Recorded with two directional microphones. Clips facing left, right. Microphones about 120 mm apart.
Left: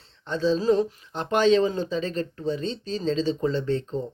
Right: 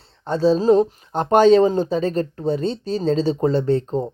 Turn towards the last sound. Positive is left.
turn(degrees=-45)  # may be behind; listen again after turning